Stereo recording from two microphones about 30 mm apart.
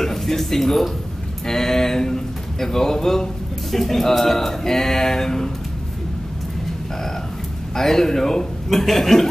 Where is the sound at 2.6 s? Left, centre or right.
Centre.